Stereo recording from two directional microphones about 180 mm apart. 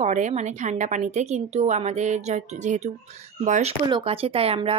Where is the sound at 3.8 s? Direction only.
30° right (ahead or behind).